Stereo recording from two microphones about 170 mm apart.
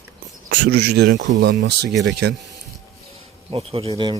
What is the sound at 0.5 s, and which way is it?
Speech, 90° right.